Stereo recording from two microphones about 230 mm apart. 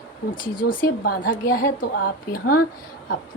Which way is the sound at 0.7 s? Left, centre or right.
Left.